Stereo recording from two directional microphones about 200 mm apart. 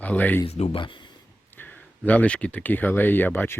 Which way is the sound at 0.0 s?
10° left (ahead or behind).